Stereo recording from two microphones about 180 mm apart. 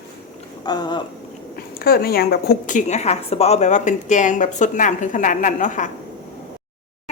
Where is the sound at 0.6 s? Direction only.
25° left (ahead or behind).